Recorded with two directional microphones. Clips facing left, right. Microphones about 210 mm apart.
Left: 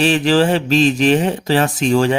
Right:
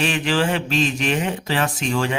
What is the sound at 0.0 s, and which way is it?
Speech, 35° left (ahead or behind).